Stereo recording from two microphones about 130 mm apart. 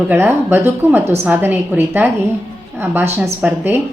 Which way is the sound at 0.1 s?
15° right (ahead or behind).